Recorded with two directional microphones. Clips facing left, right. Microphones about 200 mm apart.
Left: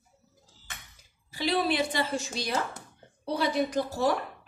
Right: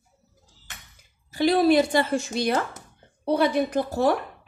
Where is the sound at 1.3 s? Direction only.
45° right (ahead or behind).